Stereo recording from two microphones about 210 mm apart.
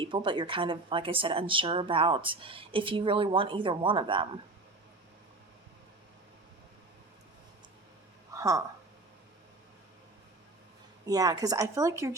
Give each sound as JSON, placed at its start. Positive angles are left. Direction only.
{"t": 0.0, "sound": "speech", "side_deg": -25}
{"t": 8.3, "sound": "a sound", "side_deg": -15}
{"t": 11.0, "sound": "speech", "side_deg": -15}